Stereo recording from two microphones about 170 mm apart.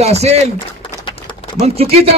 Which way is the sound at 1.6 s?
35° right (ahead or behind).